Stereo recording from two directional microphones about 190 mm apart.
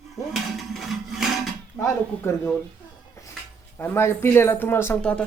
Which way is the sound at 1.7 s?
10° left (ahead or behind).